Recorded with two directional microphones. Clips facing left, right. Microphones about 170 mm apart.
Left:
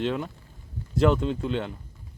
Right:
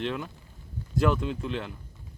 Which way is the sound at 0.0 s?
30° left (ahead or behind).